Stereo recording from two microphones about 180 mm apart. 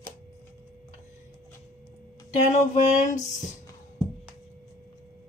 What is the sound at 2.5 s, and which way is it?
Speech, 40° left (ahead or behind).